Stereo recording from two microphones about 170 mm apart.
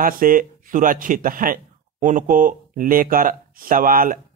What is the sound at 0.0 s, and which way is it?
Speech, 55° right (ahead or behind).